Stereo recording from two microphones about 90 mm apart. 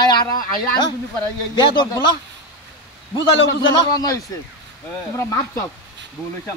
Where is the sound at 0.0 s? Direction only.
50° left (ahead or behind).